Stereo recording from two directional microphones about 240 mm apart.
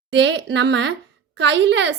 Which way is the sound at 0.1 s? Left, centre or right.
Right.